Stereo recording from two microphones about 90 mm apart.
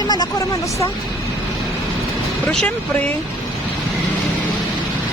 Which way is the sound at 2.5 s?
10° left (ahead or behind).